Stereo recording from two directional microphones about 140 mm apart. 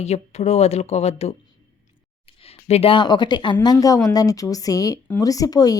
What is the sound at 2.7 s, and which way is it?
A woman's voice, 40° left (ahead or behind).